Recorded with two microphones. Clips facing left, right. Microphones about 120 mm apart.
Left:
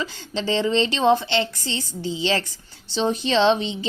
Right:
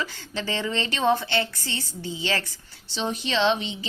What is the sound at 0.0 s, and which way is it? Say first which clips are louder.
Speech: left 4 dB; 20° left (ahead or behind).